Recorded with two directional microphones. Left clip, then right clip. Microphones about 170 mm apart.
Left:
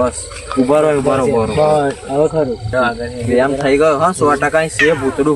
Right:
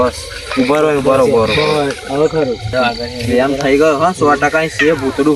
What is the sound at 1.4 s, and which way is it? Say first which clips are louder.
Speech: even; 15° left (ahead or behind).